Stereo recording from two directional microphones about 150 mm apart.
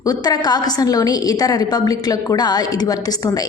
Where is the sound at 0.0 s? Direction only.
25° left (ahead or behind).